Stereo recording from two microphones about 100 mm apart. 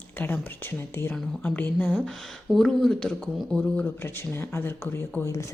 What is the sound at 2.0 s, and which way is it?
Speech, 5° left (ahead or behind).